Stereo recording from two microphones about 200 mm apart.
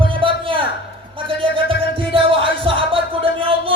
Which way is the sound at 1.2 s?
25° right (ahead or behind).